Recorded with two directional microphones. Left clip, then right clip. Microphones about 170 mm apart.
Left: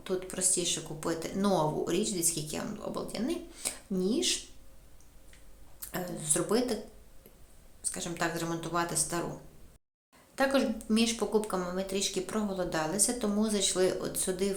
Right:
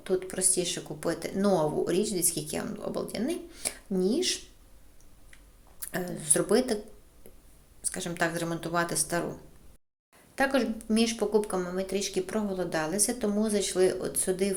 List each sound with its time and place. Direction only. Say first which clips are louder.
0.0 s speech: right 4 dB; 15° right (ahead or behind)
5.8 s a woman's voice: right 3 dB; 20° right (ahead or behind)
7.8 s a woman's voice: right 4 dB; 25° right (ahead or behind)
10.3 s speech: right 1 dB; 10° right (ahead or behind)